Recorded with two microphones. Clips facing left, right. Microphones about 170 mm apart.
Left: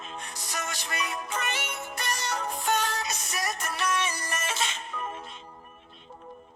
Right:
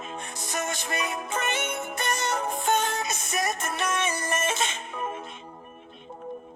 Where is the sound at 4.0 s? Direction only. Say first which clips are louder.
Right 4 dB; 50° right (ahead or behind).